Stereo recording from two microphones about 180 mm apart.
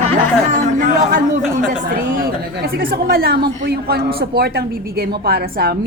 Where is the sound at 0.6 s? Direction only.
45° right (ahead or behind).